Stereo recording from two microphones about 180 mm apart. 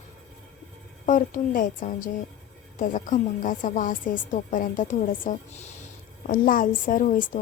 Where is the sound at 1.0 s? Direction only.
50° left (ahead or behind).